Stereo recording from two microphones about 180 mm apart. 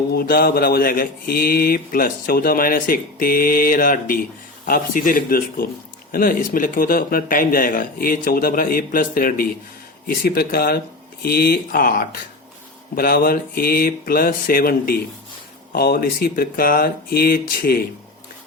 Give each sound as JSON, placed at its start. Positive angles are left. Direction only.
{"t": 0.1, "sound": "speech", "side_deg": 55}